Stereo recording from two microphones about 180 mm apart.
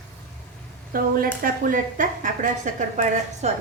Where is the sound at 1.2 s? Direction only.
55° right (ahead or behind).